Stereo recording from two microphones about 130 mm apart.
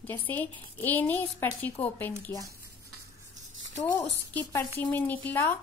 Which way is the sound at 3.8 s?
15° left (ahead or behind).